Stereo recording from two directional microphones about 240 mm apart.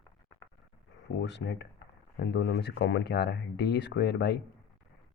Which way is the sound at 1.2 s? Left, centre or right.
Left.